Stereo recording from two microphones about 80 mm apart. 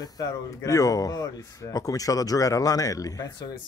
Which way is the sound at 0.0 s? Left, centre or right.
Left.